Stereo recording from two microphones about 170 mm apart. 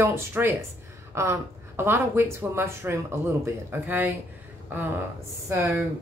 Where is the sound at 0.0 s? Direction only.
15° right (ahead or behind).